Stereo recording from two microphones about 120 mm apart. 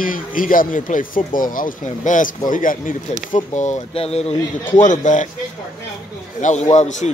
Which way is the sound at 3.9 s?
60° left (ahead or behind).